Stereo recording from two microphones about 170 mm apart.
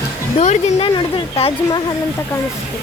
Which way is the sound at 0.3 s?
35° left (ahead or behind).